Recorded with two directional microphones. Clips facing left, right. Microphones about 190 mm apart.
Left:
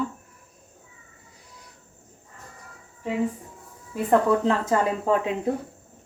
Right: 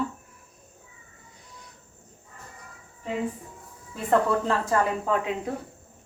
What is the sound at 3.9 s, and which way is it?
Speech, 15° left (ahead or behind).